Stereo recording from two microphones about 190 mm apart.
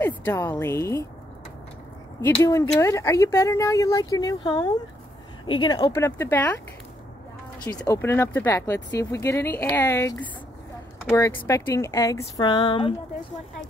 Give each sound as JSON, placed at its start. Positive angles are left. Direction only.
{"t": 0.0, "sound": "speech", "side_deg": 10}
{"t": 2.2, "sound": "speech", "side_deg": 15}
{"t": 7.7, "sound": "speech", "side_deg": 20}